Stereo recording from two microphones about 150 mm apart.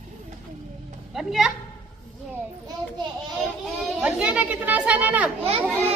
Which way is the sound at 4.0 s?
10° right (ahead or behind).